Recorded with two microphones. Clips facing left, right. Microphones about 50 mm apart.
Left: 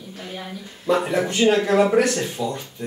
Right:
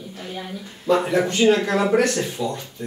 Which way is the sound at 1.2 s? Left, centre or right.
Centre.